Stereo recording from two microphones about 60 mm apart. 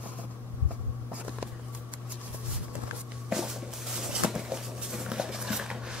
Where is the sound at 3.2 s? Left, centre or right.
Centre.